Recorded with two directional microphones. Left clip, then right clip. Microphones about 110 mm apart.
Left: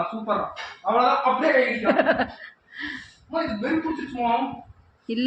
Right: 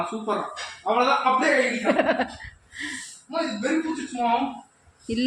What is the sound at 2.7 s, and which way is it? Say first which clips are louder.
Gasp: even; 10° right (ahead or behind).